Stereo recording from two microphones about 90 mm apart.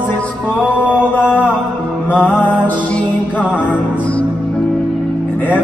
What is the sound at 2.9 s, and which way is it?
Music, 15° left (ahead or behind).